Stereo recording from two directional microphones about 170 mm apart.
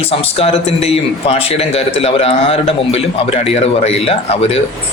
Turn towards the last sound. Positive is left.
turn(degrees=35)  # may be behind; listen again after turning